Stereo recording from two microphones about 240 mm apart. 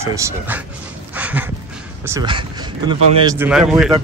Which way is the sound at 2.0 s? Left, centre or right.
Centre.